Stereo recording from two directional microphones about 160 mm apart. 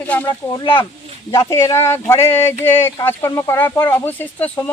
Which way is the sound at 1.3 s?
20° left (ahead or behind).